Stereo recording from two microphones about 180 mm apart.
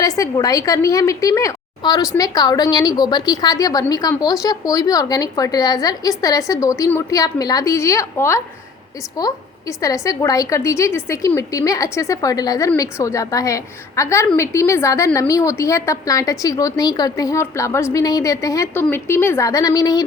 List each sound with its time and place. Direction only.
0.0 s a woman's voice: 20° left (ahead or behind)